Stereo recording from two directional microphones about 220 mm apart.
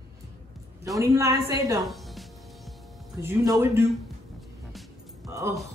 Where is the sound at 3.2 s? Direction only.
15° right (ahead or behind).